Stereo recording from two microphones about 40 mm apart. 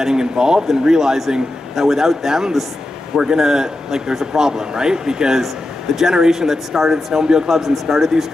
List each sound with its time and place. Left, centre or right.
0.0 s a man's voice: centre
7.4 s speech: centre